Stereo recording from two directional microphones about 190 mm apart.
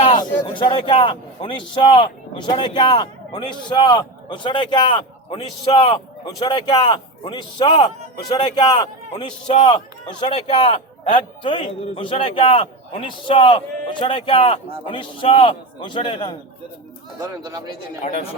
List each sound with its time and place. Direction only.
0.0 s a man's voice: 25° left (ahead or behind)
17.2 s speech: 20° right (ahead or behind)
18.0 s speech: 35° left (ahead or behind)